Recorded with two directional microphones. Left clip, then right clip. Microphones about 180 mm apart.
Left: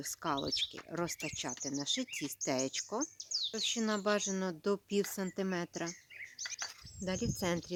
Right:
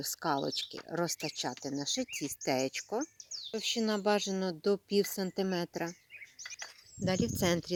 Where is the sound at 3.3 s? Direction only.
25° right (ahead or behind).